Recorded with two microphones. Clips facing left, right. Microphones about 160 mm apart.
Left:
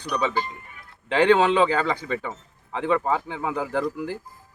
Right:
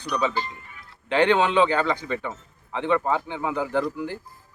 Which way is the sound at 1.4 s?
35° left (ahead or behind).